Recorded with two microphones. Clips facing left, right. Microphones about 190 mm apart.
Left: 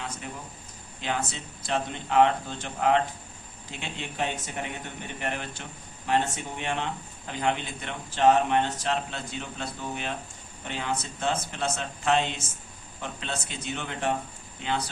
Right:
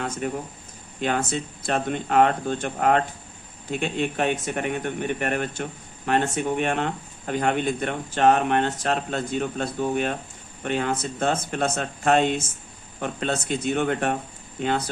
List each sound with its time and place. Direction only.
0.2 s speech: 55° right (ahead or behind)